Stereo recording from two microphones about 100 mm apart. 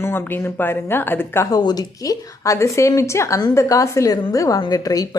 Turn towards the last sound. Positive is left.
turn(degrees=40)  # may be behind; listen again after turning